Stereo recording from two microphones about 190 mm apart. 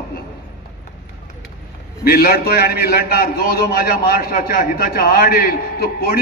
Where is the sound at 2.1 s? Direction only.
50° left (ahead or behind).